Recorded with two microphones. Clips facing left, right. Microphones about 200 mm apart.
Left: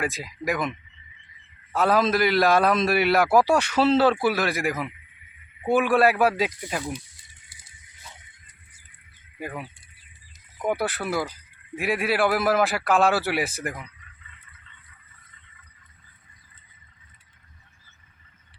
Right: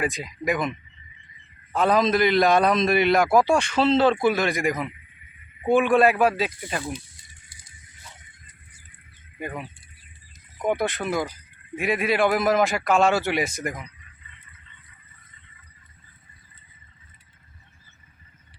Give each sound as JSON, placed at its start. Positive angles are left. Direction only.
{"t": 0.0, "sound": "a man's voice", "side_deg": 0}
{"t": 9.4, "sound": "a man's voice", "side_deg": 5}